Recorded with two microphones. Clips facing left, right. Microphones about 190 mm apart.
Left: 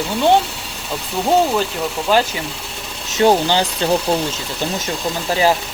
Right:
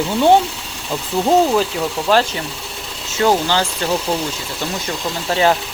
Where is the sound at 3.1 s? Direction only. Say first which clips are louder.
Left 2 dB; 20° left (ahead or behind).